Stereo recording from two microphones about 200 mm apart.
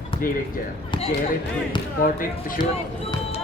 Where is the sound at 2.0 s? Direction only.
45° left (ahead or behind).